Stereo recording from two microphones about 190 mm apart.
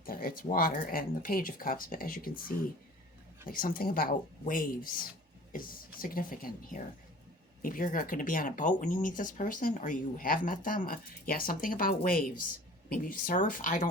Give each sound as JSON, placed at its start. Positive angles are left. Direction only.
{"t": 0.0, "sound": "speech", "side_deg": 50}
{"t": 3.4, "sound": "speech", "side_deg": 50}